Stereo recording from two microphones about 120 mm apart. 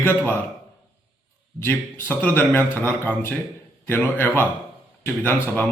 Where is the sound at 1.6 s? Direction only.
20° left (ahead or behind).